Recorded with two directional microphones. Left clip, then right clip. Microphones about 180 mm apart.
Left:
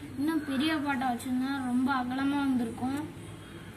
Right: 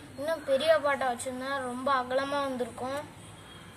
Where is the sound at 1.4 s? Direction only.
60° right (ahead or behind).